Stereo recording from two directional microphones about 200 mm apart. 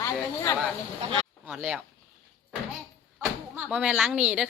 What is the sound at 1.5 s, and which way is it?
Speech, 5° right (ahead or behind).